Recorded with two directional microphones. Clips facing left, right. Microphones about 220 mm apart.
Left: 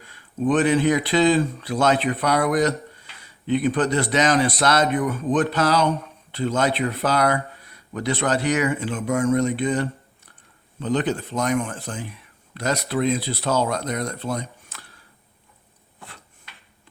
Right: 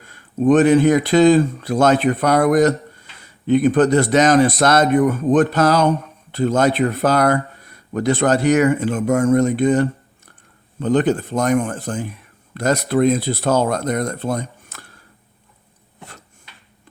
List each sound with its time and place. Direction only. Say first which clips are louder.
0.0 s speech: right 6 dB; 45° right (ahead or behind)